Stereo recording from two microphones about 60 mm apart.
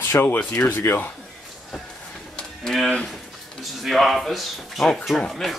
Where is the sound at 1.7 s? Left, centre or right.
Centre.